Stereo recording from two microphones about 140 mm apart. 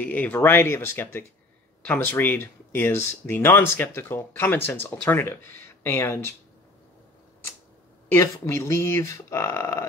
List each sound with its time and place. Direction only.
0.0 s speech: 10° left (ahead or behind)
8.1 s speech: 20° left (ahead or behind)